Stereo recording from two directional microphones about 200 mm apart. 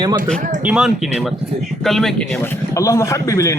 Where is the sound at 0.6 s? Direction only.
5° right (ahead or behind).